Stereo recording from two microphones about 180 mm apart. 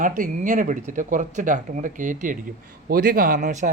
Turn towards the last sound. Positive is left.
turn(degrees=-45)  # may be behind; listen again after turning